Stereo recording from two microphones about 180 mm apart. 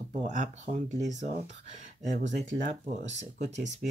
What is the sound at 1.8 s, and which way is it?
Speech, 45° right (ahead or behind).